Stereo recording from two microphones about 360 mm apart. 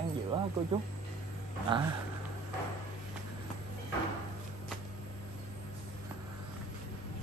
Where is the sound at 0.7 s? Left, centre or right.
Centre.